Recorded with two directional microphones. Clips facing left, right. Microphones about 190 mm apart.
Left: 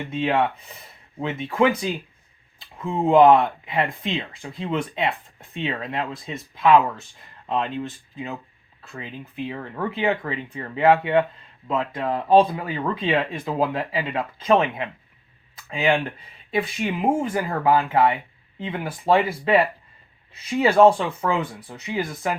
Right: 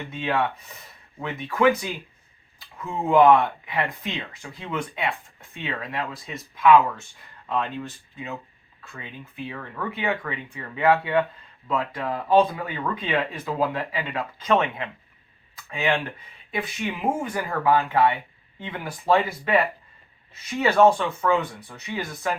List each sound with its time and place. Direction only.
0.1 s speech: 25° left (ahead or behind)
10.9 s speech: 20° left (ahead or behind)
20.6 s speech: 30° left (ahead or behind)